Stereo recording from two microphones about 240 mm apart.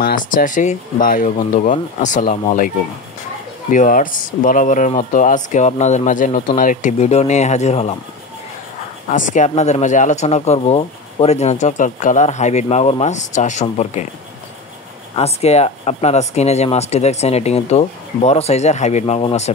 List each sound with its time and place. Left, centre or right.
0.0 s speech: left
3.7 s speech: left
9.1 s speech: left
15.1 s speech: left